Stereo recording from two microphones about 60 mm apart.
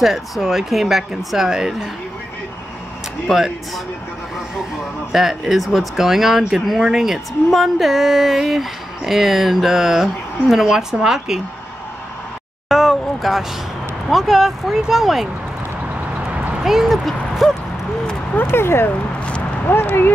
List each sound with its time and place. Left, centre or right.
0.0 s speech: centre
3.3 s speech: centre
5.1 s speech: centre
12.6 s a sound: centre
14.0 s speech: centre
16.6 s speech: centre
18.3 s speech: left